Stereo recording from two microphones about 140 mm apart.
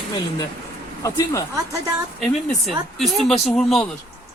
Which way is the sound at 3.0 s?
Centre (ahead or behind).